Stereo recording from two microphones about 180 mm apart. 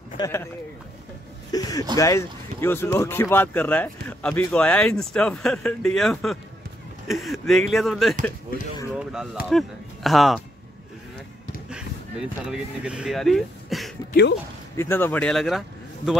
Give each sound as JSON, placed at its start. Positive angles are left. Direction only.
{"t": 0.2, "sound": "speech", "side_deg": 15}
{"t": 1.5, "sound": "speech", "side_deg": 20}
{"t": 8.5, "sound": "speech", "side_deg": 55}
{"t": 8.9, "sound": "a sound", "side_deg": -5}
{"t": 9.5, "sound": "speech", "side_deg": 0}
{"t": 11.7, "sound": "speech", "side_deg": -5}
{"t": 14.8, "sound": "speech", "side_deg": 10}